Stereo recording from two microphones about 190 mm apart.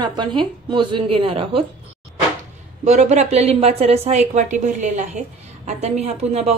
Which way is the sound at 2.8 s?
35° right (ahead or behind).